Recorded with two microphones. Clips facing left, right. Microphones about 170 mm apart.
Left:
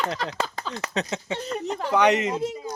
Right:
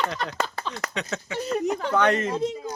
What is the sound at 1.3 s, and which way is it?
Speech, 10° right (ahead or behind).